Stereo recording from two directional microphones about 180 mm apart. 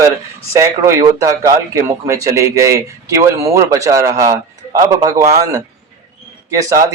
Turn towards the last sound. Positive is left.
turn(degrees=-20)  # may be behind; listen again after turning